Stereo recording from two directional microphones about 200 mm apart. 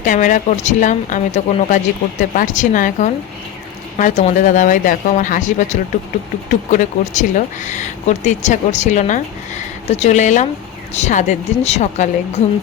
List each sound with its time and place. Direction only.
0.0 s speech: 40° left (ahead or behind)